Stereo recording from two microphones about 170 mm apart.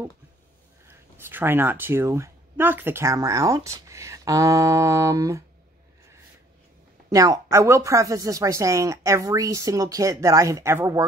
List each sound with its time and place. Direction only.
0.8 s speech: 15° right (ahead or behind)
7.1 s a woman's voice: 20° right (ahead or behind)